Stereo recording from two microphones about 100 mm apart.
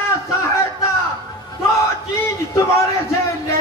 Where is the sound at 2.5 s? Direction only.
30° left (ahead or behind).